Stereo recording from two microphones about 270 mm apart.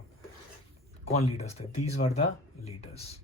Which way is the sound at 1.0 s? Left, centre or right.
Left.